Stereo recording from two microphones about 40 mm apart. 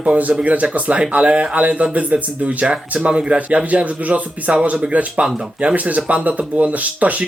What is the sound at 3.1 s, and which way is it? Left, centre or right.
Speech, right.